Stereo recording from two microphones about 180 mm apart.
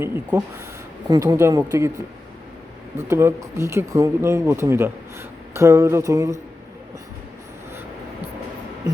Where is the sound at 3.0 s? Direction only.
15° right (ahead or behind).